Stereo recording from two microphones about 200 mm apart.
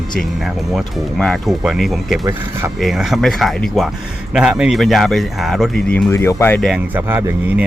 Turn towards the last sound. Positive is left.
turn(degrees=-10)  # may be behind; listen again after turning